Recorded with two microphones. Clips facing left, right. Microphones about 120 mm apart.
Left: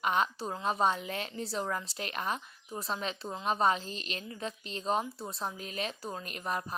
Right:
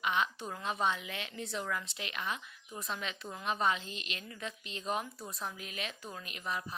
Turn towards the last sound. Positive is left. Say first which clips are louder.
# left 4 dB
turn(degrees=45)  # may be behind; listen again after turning